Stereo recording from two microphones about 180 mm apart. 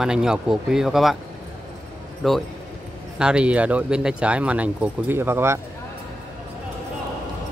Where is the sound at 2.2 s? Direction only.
Centre (ahead or behind).